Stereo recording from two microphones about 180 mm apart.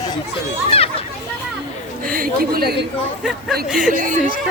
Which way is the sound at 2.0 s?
55° right (ahead or behind).